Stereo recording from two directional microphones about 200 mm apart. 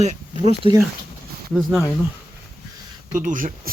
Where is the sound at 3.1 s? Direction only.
40° right (ahead or behind).